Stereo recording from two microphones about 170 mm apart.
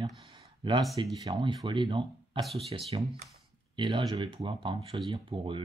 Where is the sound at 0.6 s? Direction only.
25° right (ahead or behind).